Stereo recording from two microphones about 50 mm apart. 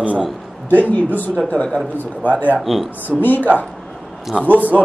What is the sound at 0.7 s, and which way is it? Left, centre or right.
Speech, left.